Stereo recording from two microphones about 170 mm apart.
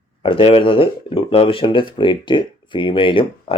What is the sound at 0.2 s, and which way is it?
Speech, 30° left (ahead or behind).